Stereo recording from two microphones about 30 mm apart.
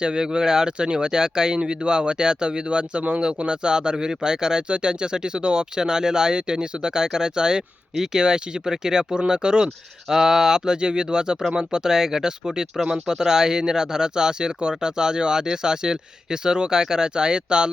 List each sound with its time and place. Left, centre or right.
0.0 s speech: right